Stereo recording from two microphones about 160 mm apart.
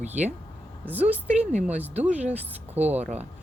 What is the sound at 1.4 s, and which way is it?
Speech, 45° right (ahead or behind).